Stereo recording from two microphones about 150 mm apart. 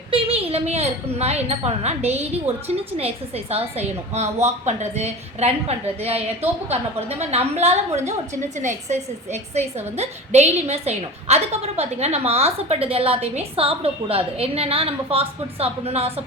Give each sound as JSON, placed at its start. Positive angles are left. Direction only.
{"t": 0.1, "sound": "a woman's voice", "side_deg": -40}